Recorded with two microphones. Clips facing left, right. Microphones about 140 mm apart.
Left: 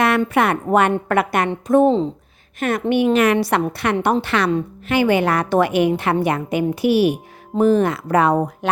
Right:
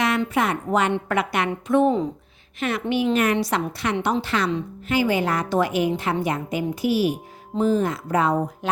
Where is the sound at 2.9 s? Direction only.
60° left (ahead or behind).